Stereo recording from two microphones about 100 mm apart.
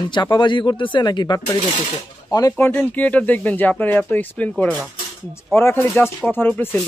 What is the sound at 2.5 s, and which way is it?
A man's voice, 20° left (ahead or behind).